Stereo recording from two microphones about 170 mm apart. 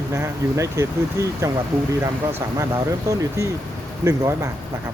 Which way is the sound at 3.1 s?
20° right (ahead or behind).